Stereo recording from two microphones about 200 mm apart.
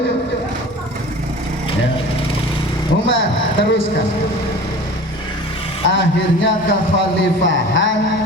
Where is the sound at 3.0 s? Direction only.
65° left (ahead or behind).